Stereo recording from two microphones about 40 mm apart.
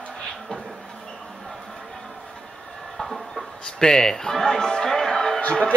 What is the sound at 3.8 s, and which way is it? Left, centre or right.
Speech, centre.